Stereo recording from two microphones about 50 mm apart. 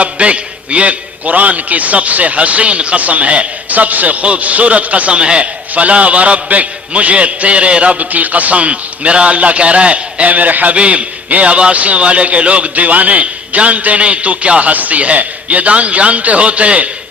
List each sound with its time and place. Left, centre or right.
0.0 s a man's voice: right